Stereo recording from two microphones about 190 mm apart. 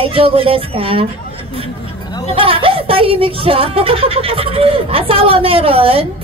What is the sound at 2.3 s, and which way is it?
Speech, 30° right (ahead or behind).